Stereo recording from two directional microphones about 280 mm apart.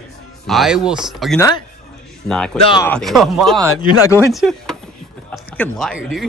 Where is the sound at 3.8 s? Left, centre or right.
Centre.